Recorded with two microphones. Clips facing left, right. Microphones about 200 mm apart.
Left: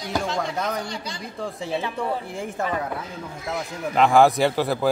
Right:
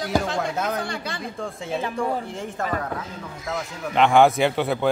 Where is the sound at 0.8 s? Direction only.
55° right (ahead or behind).